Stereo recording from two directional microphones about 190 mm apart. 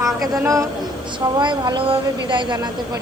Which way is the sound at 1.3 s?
25° right (ahead or behind).